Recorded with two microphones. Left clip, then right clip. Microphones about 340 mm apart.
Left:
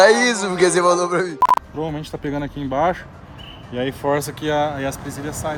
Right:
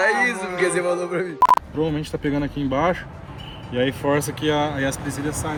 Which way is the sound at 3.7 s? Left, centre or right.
Left.